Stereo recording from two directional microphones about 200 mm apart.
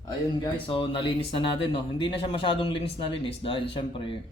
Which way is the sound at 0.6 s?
25° left (ahead or behind).